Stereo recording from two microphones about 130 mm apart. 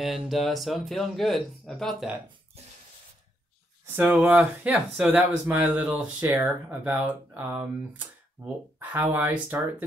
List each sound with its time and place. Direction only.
0.0 s speech: centre (ahead or behind)
3.8 s speech: 15° right (ahead or behind)
8.7 s speech: 15° right (ahead or behind)